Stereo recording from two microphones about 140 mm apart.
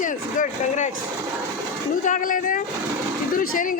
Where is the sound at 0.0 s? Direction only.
65° left (ahead or behind).